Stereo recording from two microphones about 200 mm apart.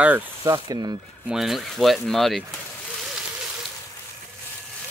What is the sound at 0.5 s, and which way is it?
Speech, 20° right (ahead or behind).